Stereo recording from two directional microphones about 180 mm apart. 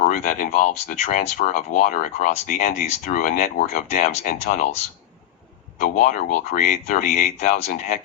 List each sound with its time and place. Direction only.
0.0 s speech: 50° left (ahead or behind)
5.8 s speech: 45° left (ahead or behind)